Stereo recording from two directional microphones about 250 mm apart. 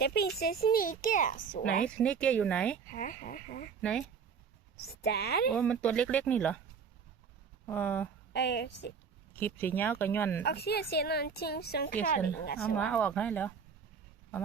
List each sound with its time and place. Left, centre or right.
0.0 s a woman's voice: left
2.0 s speech: centre
2.8 s a woman's voice: left
3.8 s speech: centre
4.9 s a woman's voice: left
5.5 s speech: centre
7.7 s speech: centre
8.3 s a woman's voice: left
9.3 s speech: centre
10.4 s a woman's voice: left
12.5 s speech: centre